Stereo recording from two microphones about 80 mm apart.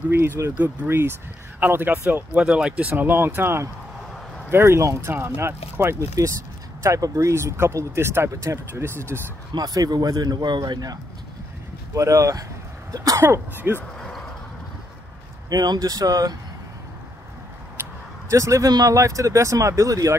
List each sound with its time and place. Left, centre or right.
0.4 s speech: right
5.9 s speech: right
9.5 s a man's voice: right
11.9 s speech: right
13.2 s speech: right
15.5 s speech: right
17.8 s a sound: right
18.3 s speech: right